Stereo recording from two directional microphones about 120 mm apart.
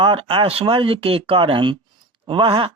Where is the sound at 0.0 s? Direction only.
50° right (ahead or behind).